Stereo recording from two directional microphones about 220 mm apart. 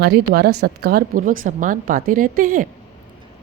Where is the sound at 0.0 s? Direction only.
45° right (ahead or behind).